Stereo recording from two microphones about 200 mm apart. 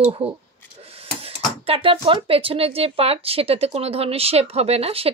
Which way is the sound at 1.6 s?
30° right (ahead or behind).